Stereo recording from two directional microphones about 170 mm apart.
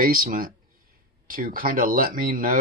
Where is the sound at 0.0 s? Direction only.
60° right (ahead or behind).